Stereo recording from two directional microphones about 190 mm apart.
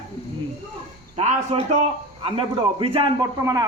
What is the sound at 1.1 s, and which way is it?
A man's voice, 35° right (ahead or behind).